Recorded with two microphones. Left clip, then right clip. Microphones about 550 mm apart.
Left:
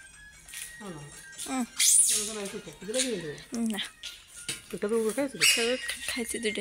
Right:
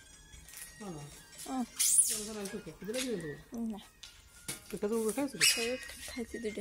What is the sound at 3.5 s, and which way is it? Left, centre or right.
Speech, right.